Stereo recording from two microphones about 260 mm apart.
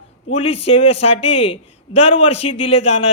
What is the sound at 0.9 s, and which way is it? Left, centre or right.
Speech, left.